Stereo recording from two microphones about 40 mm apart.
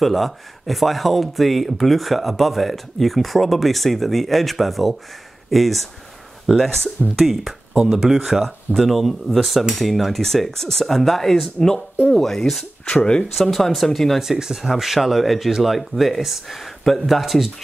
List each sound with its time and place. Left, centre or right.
0.0 s speech: centre
7.2 s speech: centre
12.8 s speech: left
13.4 s speech: centre
14.2 s speech: centre